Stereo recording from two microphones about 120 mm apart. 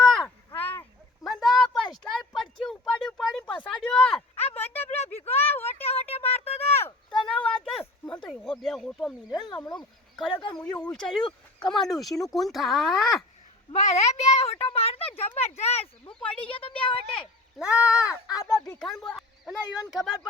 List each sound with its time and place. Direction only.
0.1 s a sound: 10° left (ahead or behind)
6.1 s a sound: 55° left (ahead or behind)
7.3 s a sound: 5° left (ahead or behind)
9.7 s speech: 5° left (ahead or behind)
11.2 s speech: 45° left (ahead or behind)
11.7 s speech: centre (ahead or behind)
13.7 s speech: 70° left (ahead or behind)
16.1 s speech: 45° left (ahead or behind)
17.6 s speech: 10° right (ahead or behind)
18.3 s speech: 30° left (ahead or behind)
18.9 s speech: centre (ahead or behind)